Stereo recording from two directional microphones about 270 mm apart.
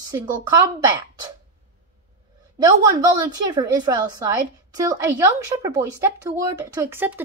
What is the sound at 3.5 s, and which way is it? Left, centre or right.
A woman's voice, centre.